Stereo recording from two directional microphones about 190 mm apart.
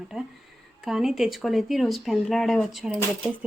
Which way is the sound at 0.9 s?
Centre (ahead or behind).